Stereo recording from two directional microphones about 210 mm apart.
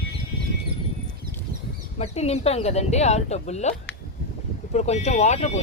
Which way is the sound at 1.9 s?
30° left (ahead or behind).